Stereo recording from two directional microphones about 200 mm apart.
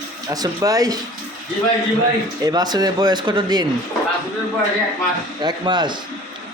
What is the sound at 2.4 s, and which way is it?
Speech, 20° right (ahead or behind).